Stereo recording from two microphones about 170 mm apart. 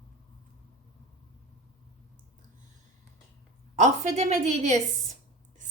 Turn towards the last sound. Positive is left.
turn(degrees=-45)  # may be behind; listen again after turning